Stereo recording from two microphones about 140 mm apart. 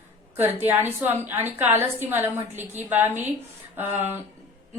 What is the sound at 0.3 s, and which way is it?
Speech, 15° right (ahead or behind).